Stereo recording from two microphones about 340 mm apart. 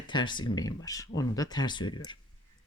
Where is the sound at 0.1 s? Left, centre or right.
Centre.